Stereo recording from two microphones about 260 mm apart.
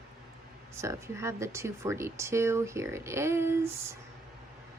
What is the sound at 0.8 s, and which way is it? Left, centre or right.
Speech, centre.